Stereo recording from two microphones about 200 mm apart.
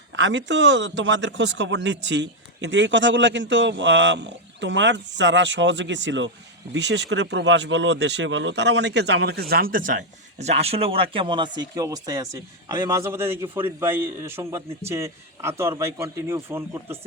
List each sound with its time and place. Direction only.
0.2 s speech: 65° right (ahead or behind); by 9.9 s 45° right (ahead or behind)
10.3 s a man's voice: 35° right (ahead or behind); by 17.1 s 10° right (ahead or behind)